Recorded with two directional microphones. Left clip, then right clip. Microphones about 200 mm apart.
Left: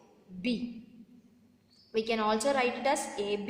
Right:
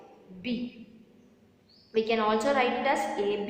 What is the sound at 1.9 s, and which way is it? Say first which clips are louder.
A woman's voice: right 3 dB; 30° left (ahead or behind).